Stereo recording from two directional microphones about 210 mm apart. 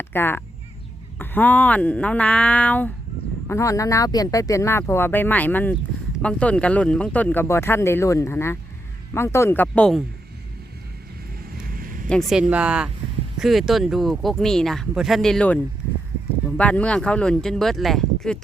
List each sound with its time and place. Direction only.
0.0 s speech: 10° left (ahead or behind)
11.7 s a sound: 45° right (ahead or behind)
12.0 s speech: centre (ahead or behind)
16.6 s speech: 5° left (ahead or behind)